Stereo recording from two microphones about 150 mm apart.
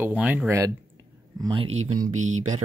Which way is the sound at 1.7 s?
50° right (ahead or behind).